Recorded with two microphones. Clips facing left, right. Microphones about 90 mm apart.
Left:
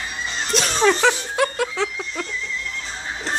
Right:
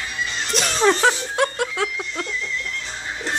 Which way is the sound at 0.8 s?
25° right (ahead or behind).